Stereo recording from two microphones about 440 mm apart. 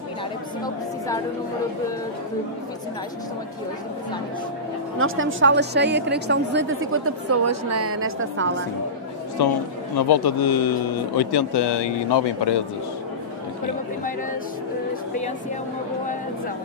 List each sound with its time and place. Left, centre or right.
4.9 s a woman's voice: right
9.4 s speech: left